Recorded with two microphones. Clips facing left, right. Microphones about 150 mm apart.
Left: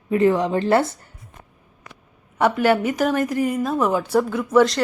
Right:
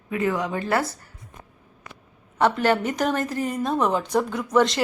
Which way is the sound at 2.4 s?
10° left (ahead or behind).